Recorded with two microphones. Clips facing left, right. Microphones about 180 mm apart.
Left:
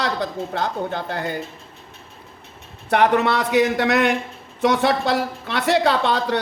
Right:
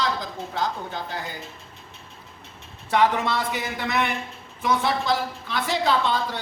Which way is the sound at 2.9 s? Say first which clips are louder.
Left 4 dB; 65° left (ahead or behind).